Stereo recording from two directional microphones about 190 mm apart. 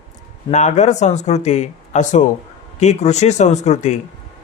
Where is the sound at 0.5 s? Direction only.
40° left (ahead or behind).